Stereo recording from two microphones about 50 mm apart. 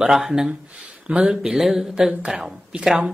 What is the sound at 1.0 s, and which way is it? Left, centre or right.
Speech, right.